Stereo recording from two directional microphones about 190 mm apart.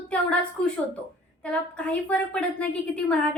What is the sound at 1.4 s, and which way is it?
A woman's voice, 5° left (ahead or behind).